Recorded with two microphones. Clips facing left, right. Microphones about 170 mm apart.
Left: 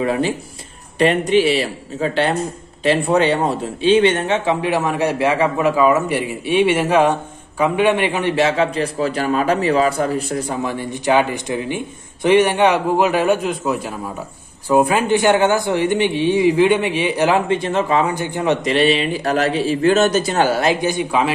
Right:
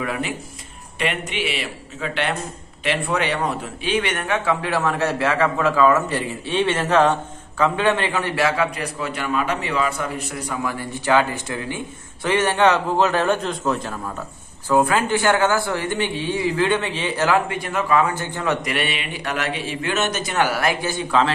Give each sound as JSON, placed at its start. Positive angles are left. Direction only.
{"t": 0.0, "sound": "a woman's voice", "side_deg": 30}